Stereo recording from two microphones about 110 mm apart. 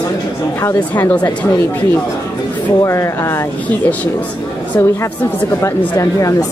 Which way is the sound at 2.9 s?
25° left (ahead or behind).